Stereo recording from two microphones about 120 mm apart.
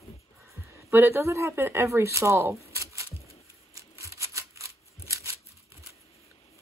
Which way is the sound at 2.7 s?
25° right (ahead or behind).